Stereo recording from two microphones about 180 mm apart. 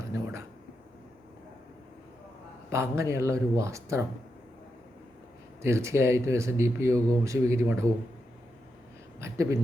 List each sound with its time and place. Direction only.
2.6 s speech: 15° right (ahead or behind)
5.6 s speech: 15° right (ahead or behind)
9.2 s speech: 15° right (ahead or behind)